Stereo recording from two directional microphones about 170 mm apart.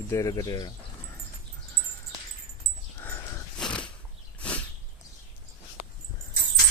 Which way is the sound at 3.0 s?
15° left (ahead or behind).